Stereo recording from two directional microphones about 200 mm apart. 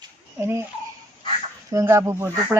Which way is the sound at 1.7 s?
15° right (ahead or behind).